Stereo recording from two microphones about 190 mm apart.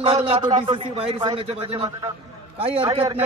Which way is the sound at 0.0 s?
30° right (ahead or behind).